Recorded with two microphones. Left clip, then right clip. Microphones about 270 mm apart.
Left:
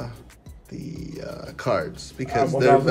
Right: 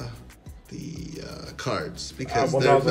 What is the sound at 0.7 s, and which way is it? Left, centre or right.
Music, right.